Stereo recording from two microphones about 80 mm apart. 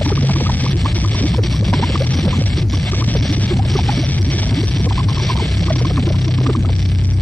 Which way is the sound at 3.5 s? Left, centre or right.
Centre.